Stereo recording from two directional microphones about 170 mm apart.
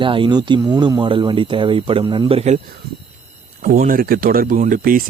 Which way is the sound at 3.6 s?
55° right (ahead or behind).